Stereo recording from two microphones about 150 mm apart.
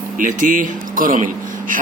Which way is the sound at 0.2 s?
60° right (ahead or behind).